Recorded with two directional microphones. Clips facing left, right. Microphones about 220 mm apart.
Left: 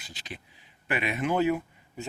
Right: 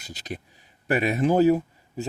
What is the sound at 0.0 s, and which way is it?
Speech, 40° right (ahead or behind).